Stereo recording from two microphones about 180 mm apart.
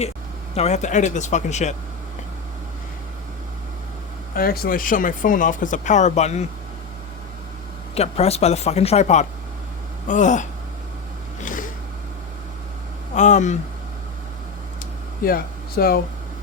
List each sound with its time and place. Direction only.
0.5 s speech: 35° left (ahead or behind)
4.4 s speech: 55° left (ahead or behind); by 6.4 s 40° left (ahead or behind)
7.9 s speech: 35° left (ahead or behind)
11.4 s a sound: 50° left (ahead or behind)
13.1 s speech: 40° left (ahead or behind)
15.2 s speech: 55° left (ahead or behind)